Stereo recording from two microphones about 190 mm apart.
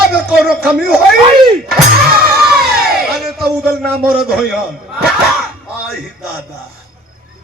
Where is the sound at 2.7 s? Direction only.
55° right (ahead or behind).